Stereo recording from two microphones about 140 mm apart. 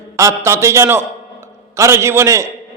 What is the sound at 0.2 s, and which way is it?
A man's voice, 20° right (ahead or behind).